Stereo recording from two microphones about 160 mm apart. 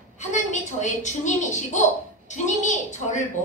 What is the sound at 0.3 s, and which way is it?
A woman's voice, 50° left (ahead or behind).